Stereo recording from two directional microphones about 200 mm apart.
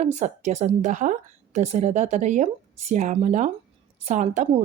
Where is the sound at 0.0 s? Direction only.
35° right (ahead or behind).